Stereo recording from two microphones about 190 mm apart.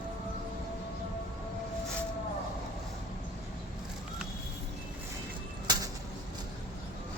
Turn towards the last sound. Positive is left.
turn(degrees=-20)  # may be behind; listen again after turning